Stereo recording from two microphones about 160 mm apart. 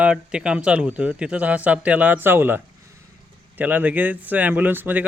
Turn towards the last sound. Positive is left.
turn(degrees=-10)  # may be behind; listen again after turning